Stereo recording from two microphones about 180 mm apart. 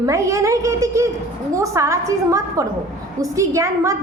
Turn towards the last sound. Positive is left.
turn(degrees=-15)  # may be behind; listen again after turning